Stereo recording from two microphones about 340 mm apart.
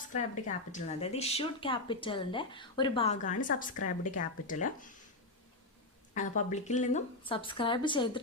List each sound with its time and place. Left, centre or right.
0.1 s speech: left
6.1 s speech: left